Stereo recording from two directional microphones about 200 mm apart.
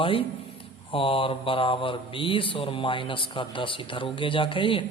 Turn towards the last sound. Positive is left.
turn(degrees=25)  # may be behind; listen again after turning